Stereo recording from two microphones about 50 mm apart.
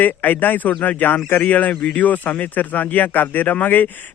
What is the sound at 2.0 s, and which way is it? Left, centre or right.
A man's voice, left.